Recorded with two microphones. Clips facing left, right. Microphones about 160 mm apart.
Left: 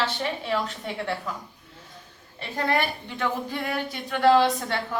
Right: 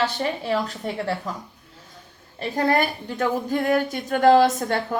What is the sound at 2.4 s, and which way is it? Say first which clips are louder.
A woman's voice: right 5 dB; 40° right (ahead or behind).